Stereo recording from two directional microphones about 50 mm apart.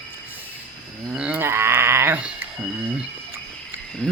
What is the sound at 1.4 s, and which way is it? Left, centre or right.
Speech, right.